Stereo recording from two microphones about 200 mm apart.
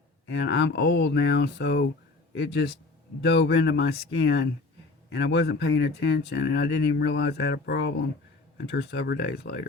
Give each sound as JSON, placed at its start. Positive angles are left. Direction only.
{"t": 0.3, "sound": "speech", "side_deg": 60}